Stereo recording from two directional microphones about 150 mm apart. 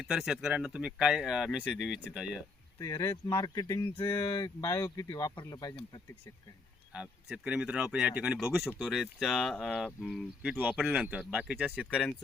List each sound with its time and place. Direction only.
0.0 s speech: centre (ahead or behind)
2.7 s speech: 25° left (ahead or behind)
6.9 s speech: 5° right (ahead or behind)